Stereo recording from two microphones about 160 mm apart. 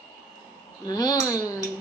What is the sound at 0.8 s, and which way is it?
Speech, 25° left (ahead or behind).